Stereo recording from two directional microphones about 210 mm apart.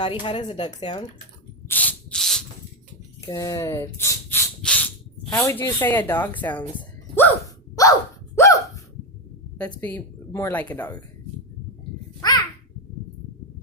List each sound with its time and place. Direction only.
0.0 s speech: 20° left (ahead or behind)
1.6 s rub: 10° left (ahead or behind)
3.2 s a sound: 15° left (ahead or behind)
5.4 s speech: 10° left (ahead or behind)
8.4 s hiccup: 15° left (ahead or behind)
9.6 s speech: 5° left (ahead or behind)